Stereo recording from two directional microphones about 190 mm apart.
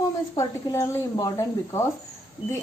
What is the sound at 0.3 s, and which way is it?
A woman's voice, 15° left (ahead or behind).